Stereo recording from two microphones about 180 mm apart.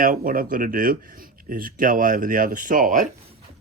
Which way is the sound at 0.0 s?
50° right (ahead or behind).